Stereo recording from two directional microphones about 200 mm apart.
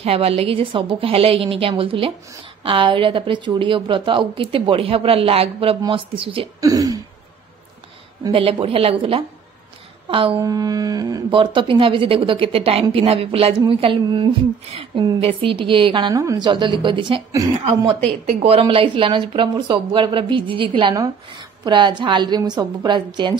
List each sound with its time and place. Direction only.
0.0 s speech: 30° right (ahead or behind)
8.2 s speech: 25° right (ahead or behind)
10.0 s speech: 25° right (ahead or behind)